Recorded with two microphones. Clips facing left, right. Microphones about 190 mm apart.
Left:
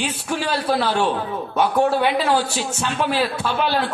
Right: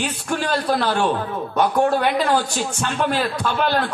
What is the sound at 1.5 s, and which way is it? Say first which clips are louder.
A man's voice: even; 5° left (ahead or behind).